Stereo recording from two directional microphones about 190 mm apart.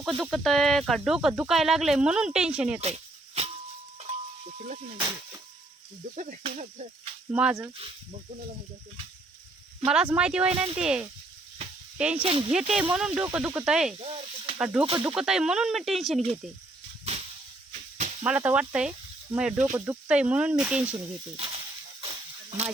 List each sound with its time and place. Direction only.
0.2 s speech: centre (ahead or behind)
2.8 s a sound: 35° right (ahead or behind)
4.5 s speech: 40° right (ahead or behind)
6.1 s speech: 40° right (ahead or behind)
7.3 s speech: 5° right (ahead or behind)
9.8 s speech: 5° right (ahead or behind)
12.2 s speech: 30° right (ahead or behind)
12.5 s speech: 5° right (ahead or behind)
14.0 s speech: 30° right (ahead or behind)
14.6 s speech: 10° right (ahead or behind)
18.2 s speech: 10° right (ahead or behind)
21.3 s sizzle: 35° right (ahead or behind)
22.0 s a sound: 30° right (ahead or behind)